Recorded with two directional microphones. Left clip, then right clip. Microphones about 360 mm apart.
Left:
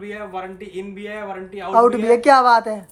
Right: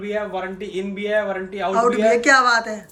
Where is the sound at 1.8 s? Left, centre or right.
Centre.